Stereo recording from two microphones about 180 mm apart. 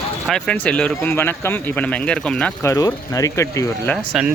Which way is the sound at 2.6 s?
15° left (ahead or behind).